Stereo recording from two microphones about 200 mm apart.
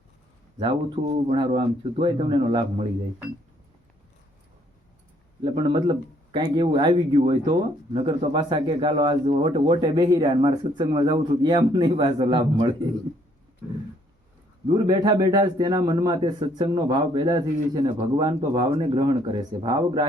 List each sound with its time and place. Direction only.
0.6 s speech: 25° right (ahead or behind)
5.4 s speech: 25° right (ahead or behind)
14.7 s speech: 20° right (ahead or behind)